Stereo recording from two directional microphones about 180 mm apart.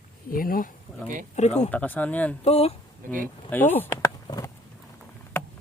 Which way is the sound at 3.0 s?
50° right (ahead or behind).